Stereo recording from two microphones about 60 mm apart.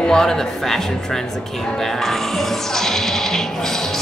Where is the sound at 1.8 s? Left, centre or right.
Centre.